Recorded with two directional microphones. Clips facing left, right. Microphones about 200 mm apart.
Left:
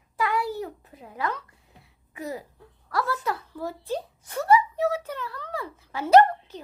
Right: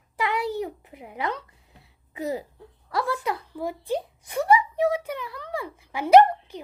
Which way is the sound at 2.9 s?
20° right (ahead or behind).